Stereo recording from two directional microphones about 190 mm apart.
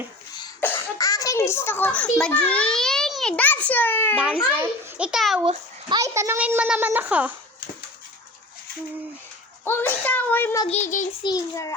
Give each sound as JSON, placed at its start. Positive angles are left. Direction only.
{"t": 0.6, "sound": "a child's voice", "side_deg": 15}
{"t": 4.2, "sound": "a child's voice", "side_deg": -5}
{"t": 5.5, "sound": "a child's voice", "side_deg": -20}
{"t": 9.6, "sound": "speech", "side_deg": 10}
{"t": 10.7, "sound": "child singing", "side_deg": 40}
{"t": 11.2, "sound": "a child's voice", "side_deg": 20}